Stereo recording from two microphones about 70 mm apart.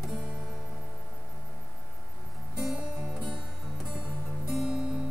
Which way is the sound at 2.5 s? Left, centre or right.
Centre.